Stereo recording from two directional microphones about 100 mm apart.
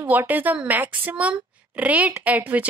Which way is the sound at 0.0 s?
15° right (ahead or behind).